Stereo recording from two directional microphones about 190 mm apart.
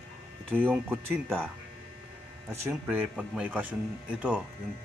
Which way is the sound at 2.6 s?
10° right (ahead or behind).